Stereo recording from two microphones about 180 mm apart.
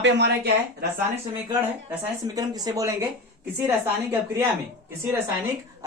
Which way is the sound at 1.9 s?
20° right (ahead or behind).